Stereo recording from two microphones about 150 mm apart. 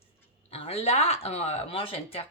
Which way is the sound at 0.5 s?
45° left (ahead or behind).